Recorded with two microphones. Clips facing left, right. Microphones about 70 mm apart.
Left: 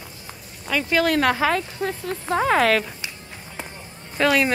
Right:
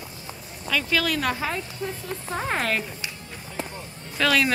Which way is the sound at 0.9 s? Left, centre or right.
Left.